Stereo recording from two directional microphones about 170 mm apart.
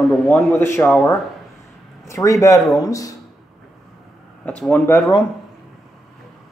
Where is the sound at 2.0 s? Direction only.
20° left (ahead or behind).